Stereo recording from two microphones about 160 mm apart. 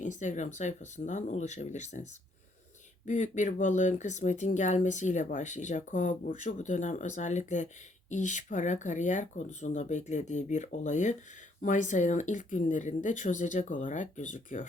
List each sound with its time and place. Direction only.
0.0 s speech: 50° left (ahead or behind)
3.1 s speech: 50° left (ahead or behind)